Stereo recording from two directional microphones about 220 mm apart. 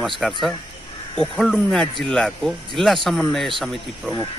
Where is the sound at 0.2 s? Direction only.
Centre (ahead or behind).